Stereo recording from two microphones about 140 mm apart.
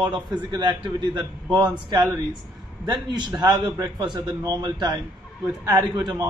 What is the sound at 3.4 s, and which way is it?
A man's voice, 30° right (ahead or behind).